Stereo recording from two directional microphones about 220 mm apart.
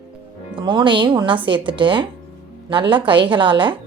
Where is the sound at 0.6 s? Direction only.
20° right (ahead or behind).